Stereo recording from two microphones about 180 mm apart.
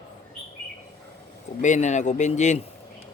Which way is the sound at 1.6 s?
40° left (ahead or behind).